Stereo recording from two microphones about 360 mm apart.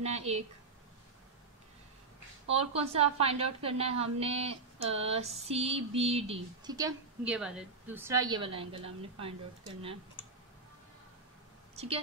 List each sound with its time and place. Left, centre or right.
0.0 s a woman's voice: centre
2.5 s a woman's voice: centre
11.7 s a sound: centre